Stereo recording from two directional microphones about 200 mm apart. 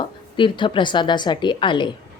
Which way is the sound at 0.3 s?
25° left (ahead or behind).